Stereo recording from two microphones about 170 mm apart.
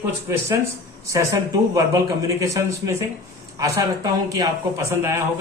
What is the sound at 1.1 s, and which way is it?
A man's voice, 20° right (ahead or behind).